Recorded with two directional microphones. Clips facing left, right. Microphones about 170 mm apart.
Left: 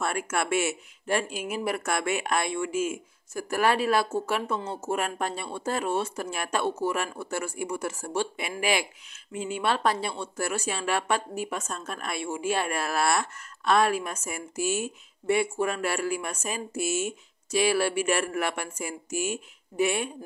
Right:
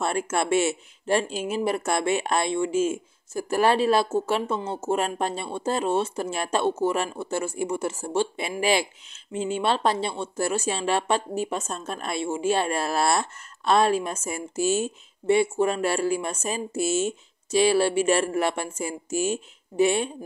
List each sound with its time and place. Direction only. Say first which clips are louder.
0.0 s speech: right 3 dB; 25° right (ahead or behind)